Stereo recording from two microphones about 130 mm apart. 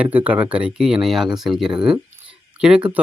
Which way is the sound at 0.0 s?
10° right (ahead or behind).